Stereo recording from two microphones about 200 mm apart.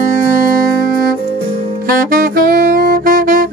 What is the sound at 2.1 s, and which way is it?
Saxophone, 45° right (ahead or behind).